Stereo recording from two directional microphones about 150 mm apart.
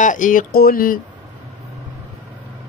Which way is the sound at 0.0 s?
60° left (ahead or behind).